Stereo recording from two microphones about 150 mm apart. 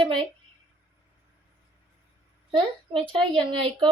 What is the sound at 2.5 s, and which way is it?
Speech, 35° right (ahead or behind).